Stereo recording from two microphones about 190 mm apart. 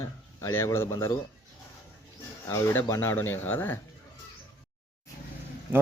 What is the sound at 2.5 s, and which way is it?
Speech, 15° left (ahead or behind).